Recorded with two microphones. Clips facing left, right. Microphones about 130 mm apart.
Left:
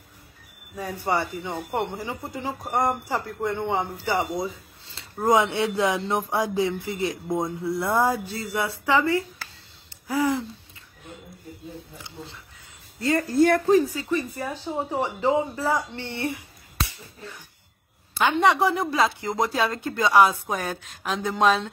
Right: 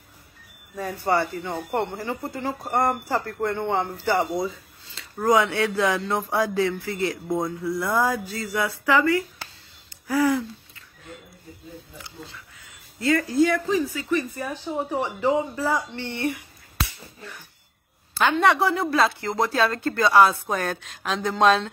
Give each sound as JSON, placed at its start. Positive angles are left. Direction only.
{"t": 0.7, "sound": "speech", "side_deg": 10}
{"t": 1.5, "sound": "speech", "side_deg": 5}
{"t": 4.9, "sound": "speech", "side_deg": 25}
{"t": 12.0, "sound": "speech", "side_deg": 25}
{"t": 13.4, "sound": "speech", "side_deg": 50}
{"t": 13.9, "sound": "speech", "side_deg": 20}
{"t": 18.4, "sound": "speech", "side_deg": 15}